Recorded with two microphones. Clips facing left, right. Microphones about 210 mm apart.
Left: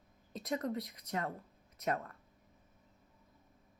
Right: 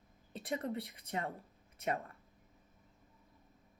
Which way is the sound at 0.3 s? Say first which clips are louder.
Left 2 dB; 30° right (ahead or behind).